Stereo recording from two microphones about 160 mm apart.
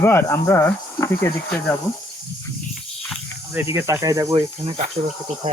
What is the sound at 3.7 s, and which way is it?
Speech, 20° right (ahead or behind).